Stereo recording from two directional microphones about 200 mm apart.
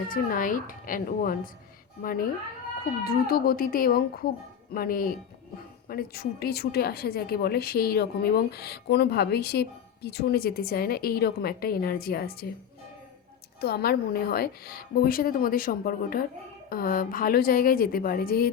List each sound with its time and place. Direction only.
0.1 s a woman's voice: 45° left (ahead or behind)
13.6 s a woman's voice: 50° left (ahead or behind)